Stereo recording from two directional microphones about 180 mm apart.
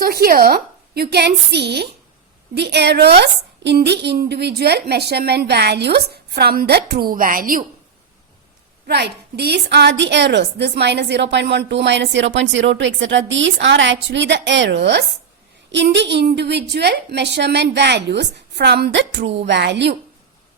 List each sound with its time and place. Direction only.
0.0 s a woman's voice: 60° right (ahead or behind)
8.9 s a woman's voice: 65° right (ahead or behind)